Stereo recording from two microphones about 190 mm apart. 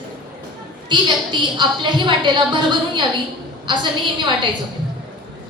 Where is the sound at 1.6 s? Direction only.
25° right (ahead or behind).